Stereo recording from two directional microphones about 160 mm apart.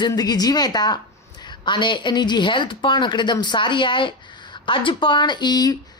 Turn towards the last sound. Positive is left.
turn(degrees=25)  # may be behind; listen again after turning